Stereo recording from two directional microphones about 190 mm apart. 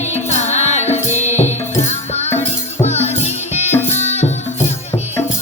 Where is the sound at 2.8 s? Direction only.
35° left (ahead or behind).